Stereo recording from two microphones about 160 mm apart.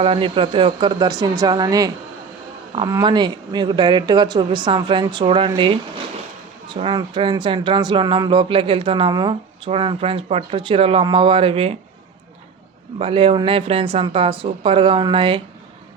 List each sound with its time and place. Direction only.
0.0 s speech: 35° right (ahead or behind)
13.0 s speech: 35° right (ahead or behind)